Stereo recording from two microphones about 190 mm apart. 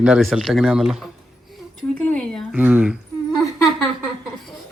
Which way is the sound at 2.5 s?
10° right (ahead or behind).